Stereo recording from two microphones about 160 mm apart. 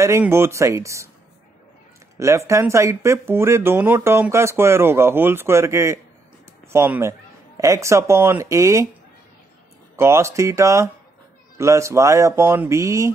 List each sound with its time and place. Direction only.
0.0 s speech: 15° right (ahead or behind)
2.1 s speech: 20° right (ahead or behind)
9.9 s speech: 15° right (ahead or behind)